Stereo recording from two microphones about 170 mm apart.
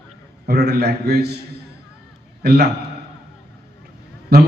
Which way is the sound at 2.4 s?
75° right (ahead or behind).